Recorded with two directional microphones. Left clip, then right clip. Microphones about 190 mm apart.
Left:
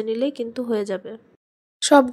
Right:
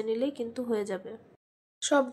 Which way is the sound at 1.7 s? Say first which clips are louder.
Left 11 dB; 50° left (ahead or behind).